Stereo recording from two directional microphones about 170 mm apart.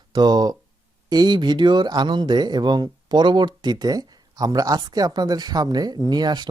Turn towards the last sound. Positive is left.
turn(degrees=-25)  # may be behind; listen again after turning